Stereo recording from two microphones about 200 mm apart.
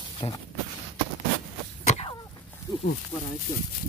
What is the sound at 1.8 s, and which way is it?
Cough, 30° left (ahead or behind).